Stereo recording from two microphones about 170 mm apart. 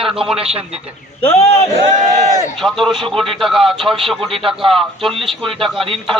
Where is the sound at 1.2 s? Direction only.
40° left (ahead or behind).